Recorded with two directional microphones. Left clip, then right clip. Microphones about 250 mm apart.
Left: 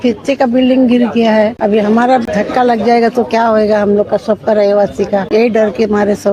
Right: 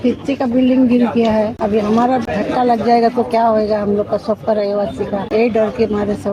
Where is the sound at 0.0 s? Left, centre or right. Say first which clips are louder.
Left 6 dB; left.